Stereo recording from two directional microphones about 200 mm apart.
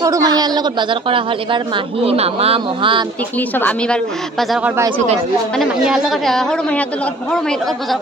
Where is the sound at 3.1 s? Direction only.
10° left (ahead or behind).